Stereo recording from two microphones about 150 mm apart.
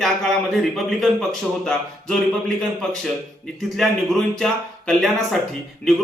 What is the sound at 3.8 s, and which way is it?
Speech, centre (ahead or behind).